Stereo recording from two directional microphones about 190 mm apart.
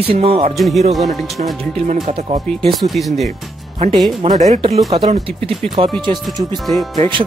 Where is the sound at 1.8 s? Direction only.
40° right (ahead or behind).